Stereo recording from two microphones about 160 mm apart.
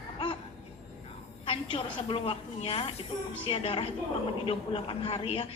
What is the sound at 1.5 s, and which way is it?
A woman's voice, 35° left (ahead or behind).